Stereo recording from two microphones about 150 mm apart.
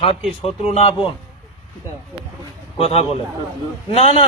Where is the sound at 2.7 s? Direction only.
40° left (ahead or behind).